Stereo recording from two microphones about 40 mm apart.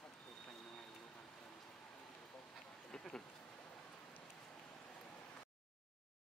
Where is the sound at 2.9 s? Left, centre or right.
Centre.